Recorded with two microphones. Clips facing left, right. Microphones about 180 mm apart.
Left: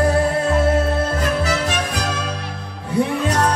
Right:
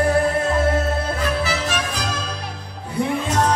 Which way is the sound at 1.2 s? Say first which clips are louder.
Left 2 dB; 50° left (ahead or behind).